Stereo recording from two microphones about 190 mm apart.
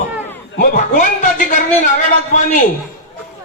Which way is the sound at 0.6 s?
45° left (ahead or behind).